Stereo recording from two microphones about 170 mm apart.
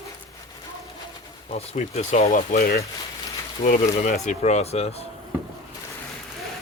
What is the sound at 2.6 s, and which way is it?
Speech, 65° left (ahead or behind).